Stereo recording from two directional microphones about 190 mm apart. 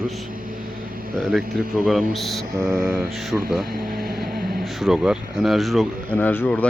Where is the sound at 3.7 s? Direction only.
55° right (ahead or behind).